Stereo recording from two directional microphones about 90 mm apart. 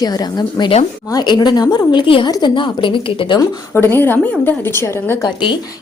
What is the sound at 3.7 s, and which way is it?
A woman's voice, 25° left (ahead or behind).